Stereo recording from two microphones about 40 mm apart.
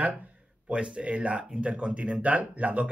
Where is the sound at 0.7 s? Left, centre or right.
Right.